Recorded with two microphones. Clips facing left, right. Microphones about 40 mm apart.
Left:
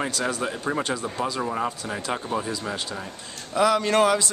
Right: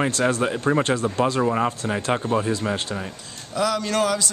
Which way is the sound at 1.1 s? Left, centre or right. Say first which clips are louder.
Right 7 dB; right.